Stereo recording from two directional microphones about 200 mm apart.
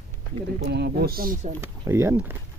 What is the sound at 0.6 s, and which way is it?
Speech, 55° right (ahead or behind).